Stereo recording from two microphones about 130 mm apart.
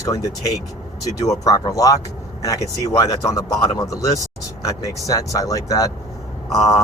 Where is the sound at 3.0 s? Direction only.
25° left (ahead or behind).